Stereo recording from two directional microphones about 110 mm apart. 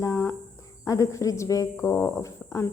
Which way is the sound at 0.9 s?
30° left (ahead or behind).